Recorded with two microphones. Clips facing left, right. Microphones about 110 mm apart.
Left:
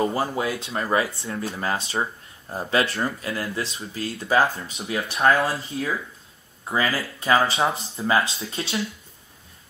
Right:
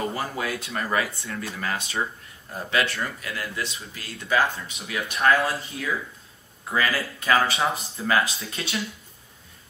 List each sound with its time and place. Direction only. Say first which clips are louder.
0.1 s speech: left 4 dB; 25° left (ahead or behind)